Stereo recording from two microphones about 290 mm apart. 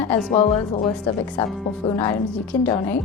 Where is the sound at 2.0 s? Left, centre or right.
Centre.